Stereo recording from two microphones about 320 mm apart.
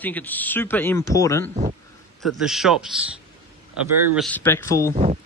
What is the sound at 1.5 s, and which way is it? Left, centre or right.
Speech, right.